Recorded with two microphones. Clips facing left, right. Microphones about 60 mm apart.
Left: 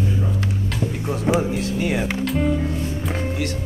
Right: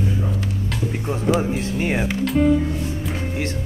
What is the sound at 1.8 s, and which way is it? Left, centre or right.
Speech, right.